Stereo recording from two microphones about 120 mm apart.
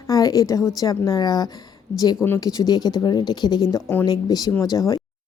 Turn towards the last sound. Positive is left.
turn(degrees=30)  # may be behind; listen again after turning